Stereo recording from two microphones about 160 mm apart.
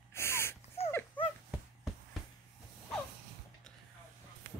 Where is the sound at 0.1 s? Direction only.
15° left (ahead or behind).